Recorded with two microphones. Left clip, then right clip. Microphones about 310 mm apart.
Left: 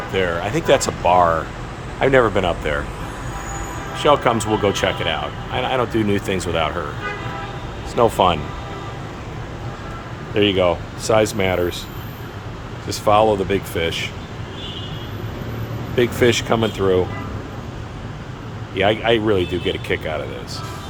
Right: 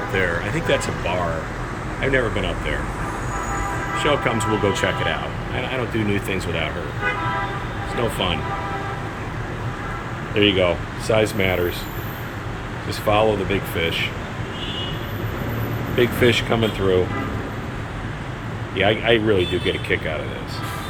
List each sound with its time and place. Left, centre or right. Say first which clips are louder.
0.1 s speech: left 3 dB; centre
2.0 s speech: left 6 dB; centre
4.0 s speech: left 6 dB; centre
8.0 s speech: left 9 dB; centre
10.3 s speech: left 1 dB; centre
12.9 s speech: left 4 dB; centre
16.0 s speech: left 1 dB; centre
18.8 s speech: left 1 dB; centre